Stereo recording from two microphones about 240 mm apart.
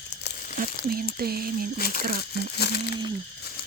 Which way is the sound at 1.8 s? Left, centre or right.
Left.